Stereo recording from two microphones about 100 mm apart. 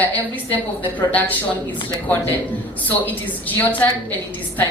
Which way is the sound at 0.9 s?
15° left (ahead or behind).